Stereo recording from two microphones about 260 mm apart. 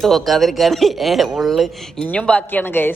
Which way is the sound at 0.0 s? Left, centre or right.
Centre.